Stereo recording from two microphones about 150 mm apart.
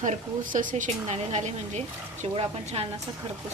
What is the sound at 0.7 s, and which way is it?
A woman's voice, 50° right (ahead or behind).